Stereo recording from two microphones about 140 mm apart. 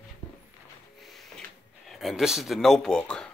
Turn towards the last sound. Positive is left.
turn(degrees=5)  # may be behind; listen again after turning